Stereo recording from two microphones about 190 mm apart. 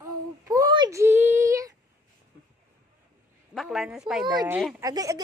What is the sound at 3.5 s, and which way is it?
Speech, centre (ahead or behind).